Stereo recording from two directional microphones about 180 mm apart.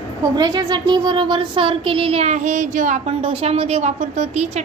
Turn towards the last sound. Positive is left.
turn(degrees=-40)  # may be behind; listen again after turning